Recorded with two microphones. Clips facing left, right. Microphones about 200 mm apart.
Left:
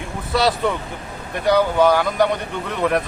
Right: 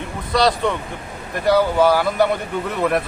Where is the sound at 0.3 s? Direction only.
5° left (ahead or behind).